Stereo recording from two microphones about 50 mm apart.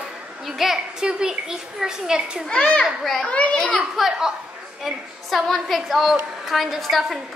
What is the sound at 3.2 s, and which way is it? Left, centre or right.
Speech, left.